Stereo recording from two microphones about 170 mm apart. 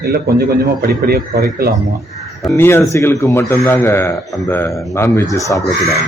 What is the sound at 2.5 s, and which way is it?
A man's voice, 15° left (ahead or behind).